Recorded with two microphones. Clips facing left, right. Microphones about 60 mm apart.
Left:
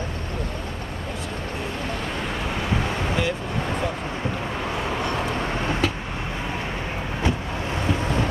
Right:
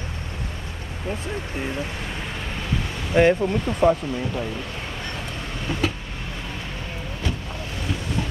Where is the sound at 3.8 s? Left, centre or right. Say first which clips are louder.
Right 10 dB; right.